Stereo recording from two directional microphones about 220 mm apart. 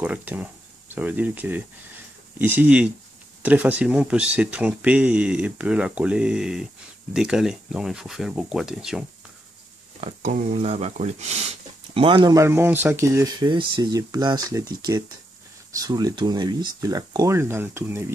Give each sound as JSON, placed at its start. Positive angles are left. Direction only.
{"t": 0.0, "sound": "speech", "side_deg": -5}
{"t": 9.9, "sound": "speech", "side_deg": -30}